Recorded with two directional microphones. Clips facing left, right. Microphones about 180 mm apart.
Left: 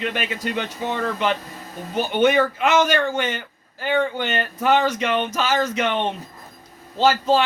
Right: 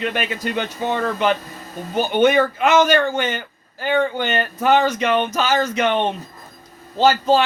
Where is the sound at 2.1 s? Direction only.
45° right (ahead or behind).